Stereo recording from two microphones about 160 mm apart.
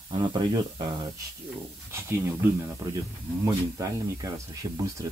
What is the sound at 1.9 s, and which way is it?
Speech, 15° right (ahead or behind).